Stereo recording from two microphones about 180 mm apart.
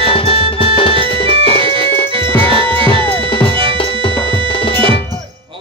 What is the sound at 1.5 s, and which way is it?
Music, 30° right (ahead or behind).